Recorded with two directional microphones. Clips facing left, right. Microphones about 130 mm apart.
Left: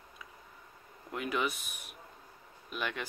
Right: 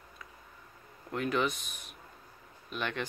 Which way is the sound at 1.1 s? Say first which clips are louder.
Right 3 dB; 5° left (ahead or behind).